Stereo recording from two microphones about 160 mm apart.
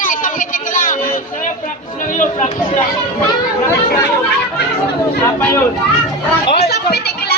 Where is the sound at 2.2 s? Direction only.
50° left (ahead or behind).